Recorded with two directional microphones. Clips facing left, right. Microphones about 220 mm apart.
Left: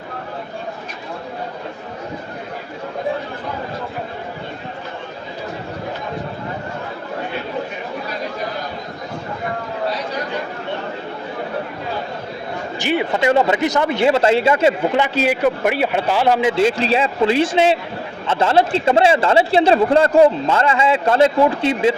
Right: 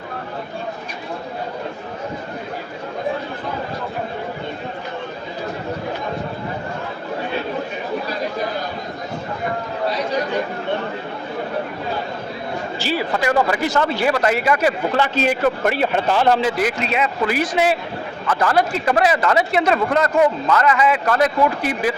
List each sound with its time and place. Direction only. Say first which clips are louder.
12.8 s speech: left 4 dB; 20° left (ahead or behind)